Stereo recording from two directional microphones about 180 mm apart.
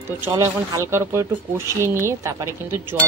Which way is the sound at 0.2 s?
15° right (ahead or behind).